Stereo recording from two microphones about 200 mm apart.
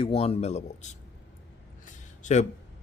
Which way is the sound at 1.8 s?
40° left (ahead or behind).